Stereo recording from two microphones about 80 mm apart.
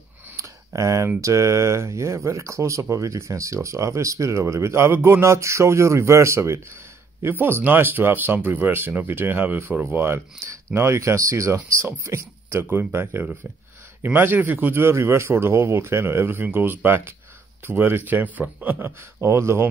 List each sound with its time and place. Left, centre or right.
0.4 s a man's voice: right
10.0 s speech: right
11.0 s a man's voice: right